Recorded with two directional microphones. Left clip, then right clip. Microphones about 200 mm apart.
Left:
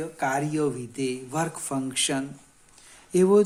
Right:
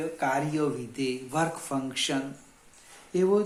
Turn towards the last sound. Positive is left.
turn(degrees=55)  # may be behind; listen again after turning